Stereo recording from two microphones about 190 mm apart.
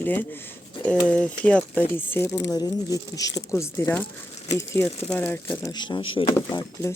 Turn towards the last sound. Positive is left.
turn(degrees=15)  # may be behind; listen again after turning